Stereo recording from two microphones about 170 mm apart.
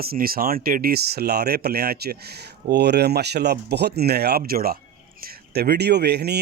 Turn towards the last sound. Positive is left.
turn(degrees=-75)  # may be behind; listen again after turning